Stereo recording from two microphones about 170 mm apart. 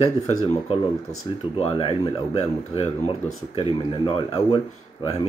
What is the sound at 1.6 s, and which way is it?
Speech, 35° left (ahead or behind).